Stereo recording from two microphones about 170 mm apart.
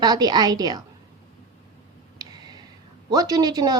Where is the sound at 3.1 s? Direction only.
20° right (ahead or behind).